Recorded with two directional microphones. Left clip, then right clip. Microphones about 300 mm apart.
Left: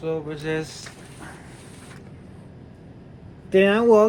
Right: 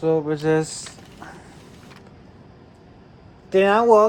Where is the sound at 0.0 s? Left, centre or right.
Right.